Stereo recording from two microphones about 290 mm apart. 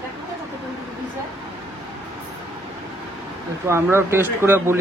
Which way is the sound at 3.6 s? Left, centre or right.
Centre.